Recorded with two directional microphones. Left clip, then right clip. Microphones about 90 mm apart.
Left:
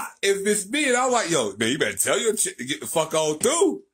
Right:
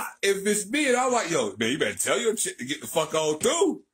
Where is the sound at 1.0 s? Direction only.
40° left (ahead or behind).